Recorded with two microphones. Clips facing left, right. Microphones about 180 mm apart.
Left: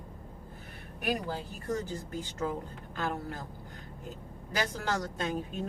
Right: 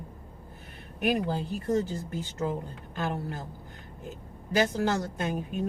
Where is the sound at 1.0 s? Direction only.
20° right (ahead or behind).